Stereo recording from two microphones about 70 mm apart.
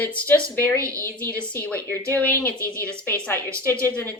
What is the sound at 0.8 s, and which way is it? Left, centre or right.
Speech, right.